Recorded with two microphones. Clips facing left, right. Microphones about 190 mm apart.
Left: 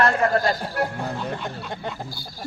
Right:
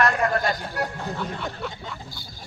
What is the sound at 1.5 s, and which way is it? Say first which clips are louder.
Speech: left 2 dB; 60° left (ahead or behind).